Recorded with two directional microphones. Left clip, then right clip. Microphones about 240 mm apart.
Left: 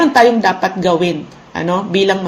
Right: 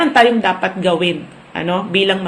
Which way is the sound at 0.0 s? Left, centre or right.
Left.